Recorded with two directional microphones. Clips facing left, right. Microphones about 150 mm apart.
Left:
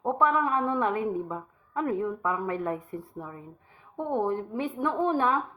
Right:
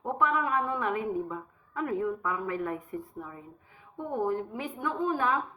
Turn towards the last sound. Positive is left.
turn(degrees=30)  # may be behind; listen again after turning